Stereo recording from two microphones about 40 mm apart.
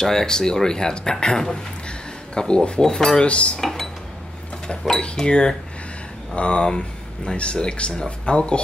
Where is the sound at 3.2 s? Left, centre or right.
Left.